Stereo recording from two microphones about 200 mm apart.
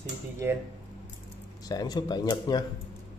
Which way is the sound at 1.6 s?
20° left (ahead or behind).